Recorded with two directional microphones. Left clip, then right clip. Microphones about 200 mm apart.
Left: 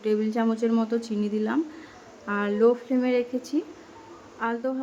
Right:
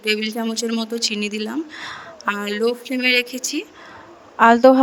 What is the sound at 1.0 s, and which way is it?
Speech, 50° right (ahead or behind).